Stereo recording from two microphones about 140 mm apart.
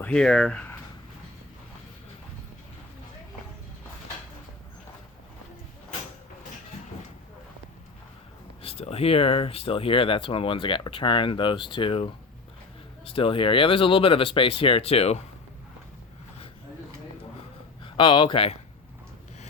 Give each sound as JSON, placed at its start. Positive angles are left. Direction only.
{"t": 0.0, "sound": "speech", "side_deg": 5}
{"t": 8.6, "sound": "speech", "side_deg": 45}
{"t": 13.1, "sound": "speech", "side_deg": 40}
{"t": 17.8, "sound": "a man's voice", "side_deg": 35}